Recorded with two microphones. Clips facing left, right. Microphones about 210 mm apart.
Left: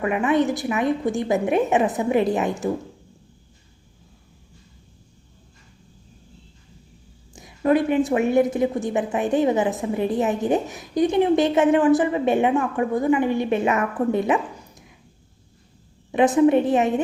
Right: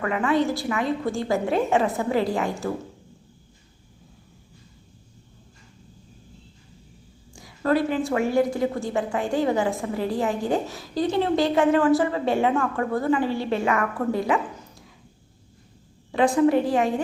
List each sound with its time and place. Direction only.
0.0 s a woman's voice: 20° left (ahead or behind)
7.3 s a woman's voice: 20° left (ahead or behind)
16.1 s a woman's voice: 20° left (ahead or behind)